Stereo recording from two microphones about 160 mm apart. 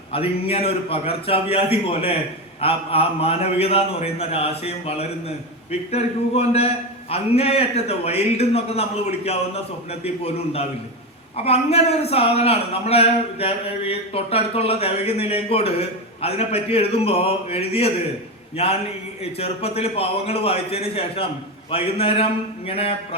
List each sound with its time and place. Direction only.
0.1 s a man's voice: 35° left (ahead or behind)